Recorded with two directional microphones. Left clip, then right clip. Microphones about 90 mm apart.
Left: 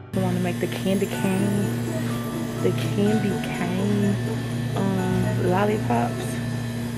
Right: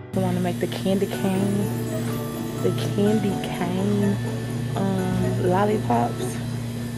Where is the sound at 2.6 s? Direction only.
20° right (ahead or behind).